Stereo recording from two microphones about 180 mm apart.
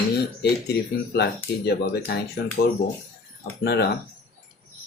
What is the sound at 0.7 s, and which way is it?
Speech, 65° left (ahead or behind).